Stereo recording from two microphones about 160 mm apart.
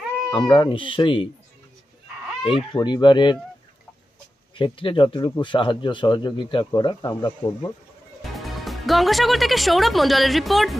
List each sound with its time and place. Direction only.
0.3 s speech: 25° left (ahead or behind)
2.7 s speech: 30° left (ahead or behind)
4.6 s speech: 30° left (ahead or behind)
8.2 s speech: centre (ahead or behind)